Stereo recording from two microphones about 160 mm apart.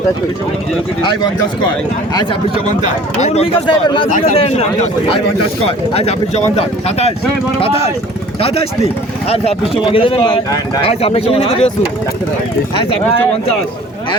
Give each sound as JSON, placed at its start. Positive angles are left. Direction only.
{"t": 1.0, "sound": "speech", "side_deg": 25}
{"t": 3.2, "sound": "speech", "side_deg": 45}
{"t": 3.7, "sound": "speech", "side_deg": 30}
{"t": 4.4, "sound": "speech", "side_deg": 40}
{"t": 9.3, "sound": "speech", "side_deg": 40}